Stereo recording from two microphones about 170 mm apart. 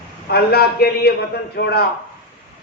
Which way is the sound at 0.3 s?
65° left (ahead or behind).